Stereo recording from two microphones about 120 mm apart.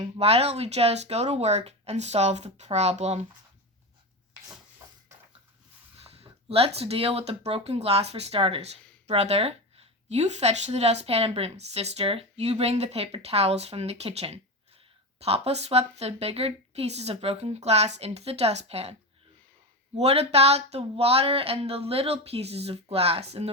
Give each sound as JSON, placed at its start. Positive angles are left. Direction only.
{"t": 0.2, "sound": "speech", "side_deg": -60}
{"t": 6.0, "sound": "speech", "side_deg": -55}
{"t": 9.0, "sound": "speech", "side_deg": -60}
{"t": 20.0, "sound": "speech", "side_deg": -60}